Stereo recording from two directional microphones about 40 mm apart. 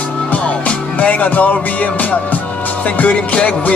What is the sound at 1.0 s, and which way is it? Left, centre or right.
Music, left.